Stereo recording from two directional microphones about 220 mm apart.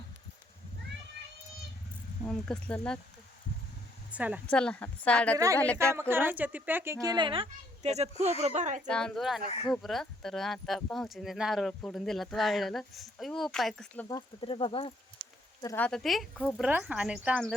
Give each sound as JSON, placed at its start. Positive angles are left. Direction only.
{"t": 2.2, "sound": "speech", "side_deg": 5}
{"t": 4.1, "sound": "speech", "side_deg": -5}
{"t": 4.4, "sound": "speech", "side_deg": 5}
{"t": 5.7, "sound": "speech", "side_deg": -10}
{"t": 8.9, "sound": "speech", "side_deg": 5}
{"t": 14.2, "sound": "speech", "side_deg": 25}
{"t": 15.6, "sound": "speech", "side_deg": 10}